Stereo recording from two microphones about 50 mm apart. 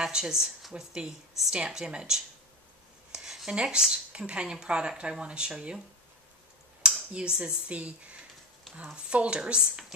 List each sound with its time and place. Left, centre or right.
0.0 s speech: centre
0.9 s speech: centre
3.1 s a sound: centre
3.5 s speech: centre
6.8 s speech: centre